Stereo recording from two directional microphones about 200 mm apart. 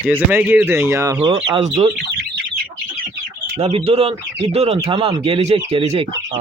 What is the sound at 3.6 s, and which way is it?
Speech, 30° right (ahead or behind).